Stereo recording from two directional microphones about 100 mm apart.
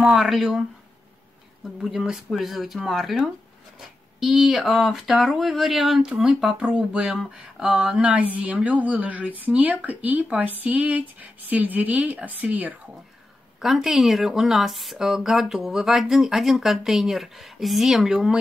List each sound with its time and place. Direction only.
0.0 s speech: 5° right (ahead or behind)
1.8 s speech: 5° right (ahead or behind)
13.6 s speech: 5° right (ahead or behind)